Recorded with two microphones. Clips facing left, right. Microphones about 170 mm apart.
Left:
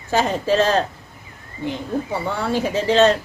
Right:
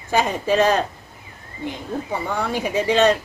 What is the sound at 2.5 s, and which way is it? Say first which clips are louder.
Speech: left 2 dB; 15° right (ahead or behind).